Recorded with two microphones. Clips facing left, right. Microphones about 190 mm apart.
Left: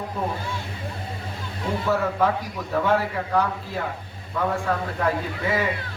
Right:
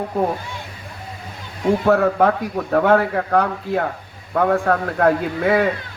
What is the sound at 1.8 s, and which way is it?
A man's voice, 60° right (ahead or behind).